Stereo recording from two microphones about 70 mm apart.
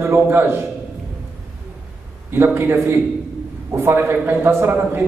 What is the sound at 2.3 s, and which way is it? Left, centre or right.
A man's voice, right.